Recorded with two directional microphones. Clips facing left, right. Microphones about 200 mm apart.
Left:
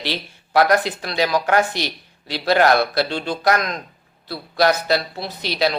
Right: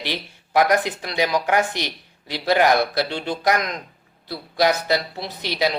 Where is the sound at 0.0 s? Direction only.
15° right (ahead or behind).